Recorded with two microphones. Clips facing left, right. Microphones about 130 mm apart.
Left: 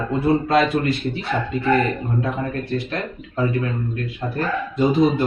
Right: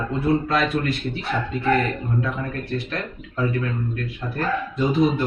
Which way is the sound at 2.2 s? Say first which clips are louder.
Left 3 dB; 35° left (ahead or behind).